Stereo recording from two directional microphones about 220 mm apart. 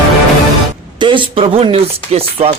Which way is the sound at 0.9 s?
20° right (ahead or behind).